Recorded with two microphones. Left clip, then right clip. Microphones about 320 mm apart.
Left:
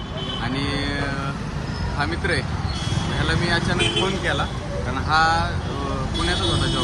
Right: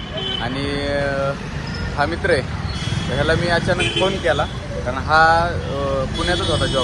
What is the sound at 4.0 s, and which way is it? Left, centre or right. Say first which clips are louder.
A man's voice: right 5 dB; centre.